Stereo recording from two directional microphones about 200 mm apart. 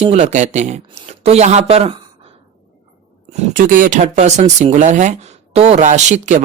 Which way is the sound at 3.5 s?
40° right (ahead or behind).